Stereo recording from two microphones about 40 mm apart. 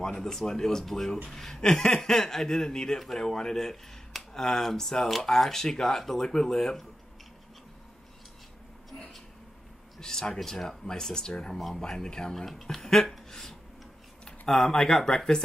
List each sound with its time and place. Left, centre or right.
0.0 s speech: centre
9.9 s speech: centre
13.3 s a sound: centre
14.5 s speech: centre